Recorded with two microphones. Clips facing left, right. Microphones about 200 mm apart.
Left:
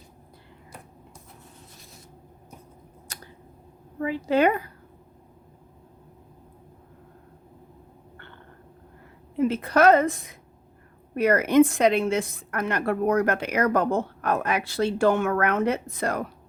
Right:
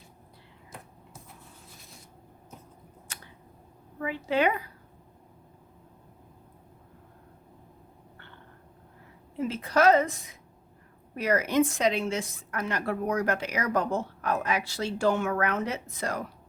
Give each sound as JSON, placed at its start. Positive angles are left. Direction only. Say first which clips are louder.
{"t": 3.1, "sound": "a sound", "louder": "left 4 dB", "side_deg": 40}
{"t": 4.0, "sound": "a woman's voice", "louder": "left 5 dB", "side_deg": 40}
{"t": 9.4, "sound": "a woman's voice", "louder": "left 4 dB", "side_deg": 55}